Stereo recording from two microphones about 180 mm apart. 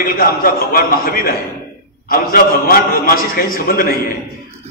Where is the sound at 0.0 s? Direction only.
55° left (ahead or behind).